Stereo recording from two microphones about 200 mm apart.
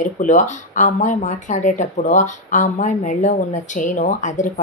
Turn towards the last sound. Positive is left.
turn(degrees=40)  # may be behind; listen again after turning